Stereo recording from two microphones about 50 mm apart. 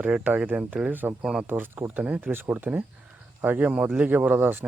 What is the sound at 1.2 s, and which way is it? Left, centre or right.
Speech, centre.